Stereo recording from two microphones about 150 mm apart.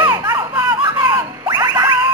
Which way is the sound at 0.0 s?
30° right (ahead or behind).